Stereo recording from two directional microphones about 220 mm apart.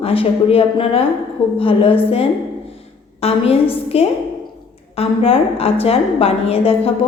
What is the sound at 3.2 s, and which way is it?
A woman's voice, 30° left (ahead or behind).